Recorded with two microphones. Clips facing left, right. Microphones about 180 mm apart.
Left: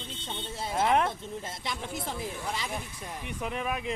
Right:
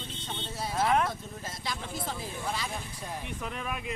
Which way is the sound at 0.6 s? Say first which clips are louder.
Left 1 dB; 25° left (ahead or behind).